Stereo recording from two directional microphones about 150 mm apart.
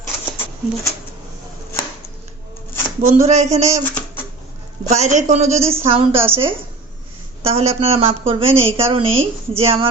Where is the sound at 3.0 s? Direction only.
50° right (ahead or behind).